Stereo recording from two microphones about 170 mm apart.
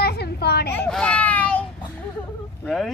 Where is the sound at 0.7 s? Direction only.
5° left (ahead or behind).